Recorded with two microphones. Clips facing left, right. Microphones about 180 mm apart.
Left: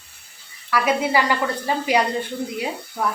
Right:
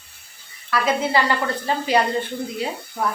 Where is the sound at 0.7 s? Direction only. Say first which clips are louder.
Left 1 dB; 10° left (ahead or behind).